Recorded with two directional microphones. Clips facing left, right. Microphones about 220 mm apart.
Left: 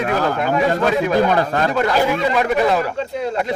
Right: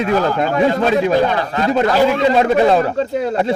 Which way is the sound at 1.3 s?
50° left (ahead or behind).